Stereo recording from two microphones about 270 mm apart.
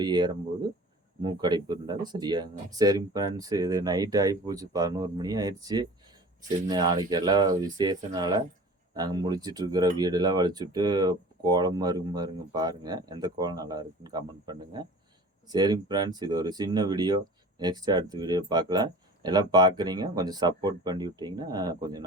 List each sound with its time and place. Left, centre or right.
0.0 s speech: centre